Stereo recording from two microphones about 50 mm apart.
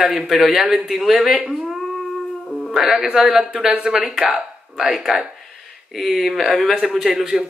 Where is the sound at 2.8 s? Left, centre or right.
Centre.